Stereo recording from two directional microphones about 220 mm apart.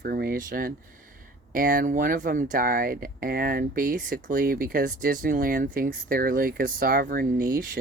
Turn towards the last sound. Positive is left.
turn(degrees=-40)  # may be behind; listen again after turning